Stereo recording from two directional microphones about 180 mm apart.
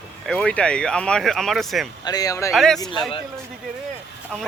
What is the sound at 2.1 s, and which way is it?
Speech, 20° left (ahead or behind).